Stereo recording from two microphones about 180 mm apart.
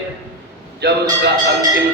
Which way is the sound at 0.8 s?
70° right (ahead or behind).